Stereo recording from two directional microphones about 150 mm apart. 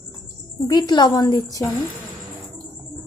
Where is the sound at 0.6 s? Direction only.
25° left (ahead or behind).